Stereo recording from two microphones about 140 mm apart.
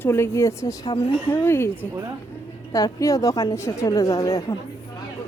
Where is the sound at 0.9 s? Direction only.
35° left (ahead or behind).